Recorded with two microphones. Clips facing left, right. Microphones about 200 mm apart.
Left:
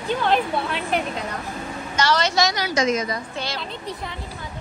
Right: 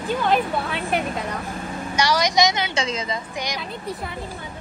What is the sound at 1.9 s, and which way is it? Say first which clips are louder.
A woman's voice: right 1 dB; 10° right (ahead or behind).